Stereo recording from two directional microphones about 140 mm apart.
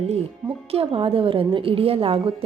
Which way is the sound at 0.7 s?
40° right (ahead or behind).